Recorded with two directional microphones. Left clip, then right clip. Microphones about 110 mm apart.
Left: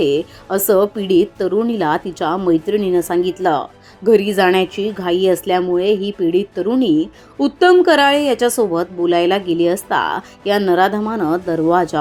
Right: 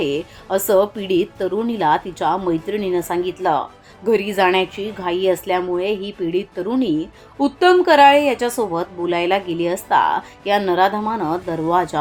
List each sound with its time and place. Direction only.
0.4 s a woman's voice: 20° left (ahead or behind)